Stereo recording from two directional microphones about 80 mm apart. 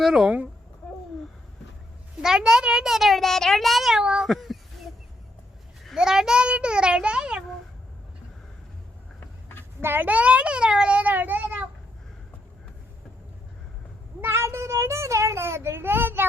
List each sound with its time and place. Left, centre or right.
0.0 s speech: centre
2.2 s a child's voice: centre
6.0 s a child's voice: centre
9.8 s a child's voice: right
14.2 s a child's voice: right